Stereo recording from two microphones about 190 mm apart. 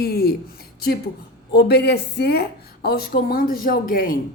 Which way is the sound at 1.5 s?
60° left (ahead or behind).